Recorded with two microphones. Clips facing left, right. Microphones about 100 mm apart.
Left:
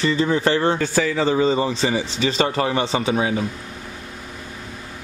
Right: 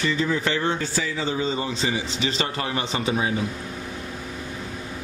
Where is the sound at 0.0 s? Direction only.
40° left (ahead or behind).